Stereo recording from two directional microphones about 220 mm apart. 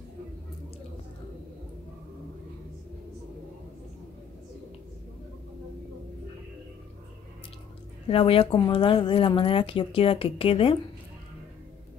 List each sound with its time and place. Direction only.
8.1 s speech: 25° left (ahead or behind)